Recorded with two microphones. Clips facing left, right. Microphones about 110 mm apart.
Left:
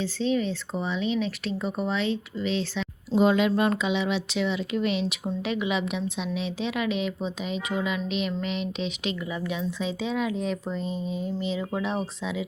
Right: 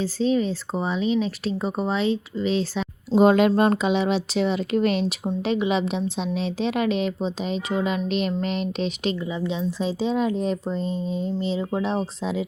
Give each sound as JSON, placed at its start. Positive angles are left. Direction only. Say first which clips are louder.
{"t": 0.0, "sound": "speech", "louder": "right 4 dB", "side_deg": -40}
{"t": 5.2, "sound": "speech", "louder": "right 5 dB", "side_deg": -30}
{"t": 7.9, "sound": "speech", "louder": "right 4 dB", "side_deg": -45}
{"t": 9.3, "sound": "speech", "louder": "right 4 dB", "side_deg": -25}